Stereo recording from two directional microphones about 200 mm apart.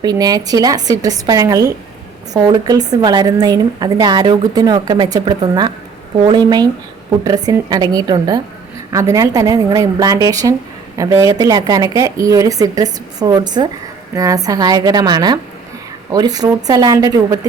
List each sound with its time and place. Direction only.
0.0 s a woman's voice: 20° right (ahead or behind)